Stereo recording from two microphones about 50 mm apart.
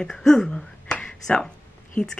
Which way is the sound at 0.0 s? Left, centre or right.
Centre.